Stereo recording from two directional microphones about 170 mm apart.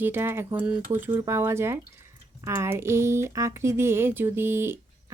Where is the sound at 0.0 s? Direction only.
15° right (ahead or behind).